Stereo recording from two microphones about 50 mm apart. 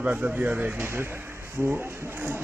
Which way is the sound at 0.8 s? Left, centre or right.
Right.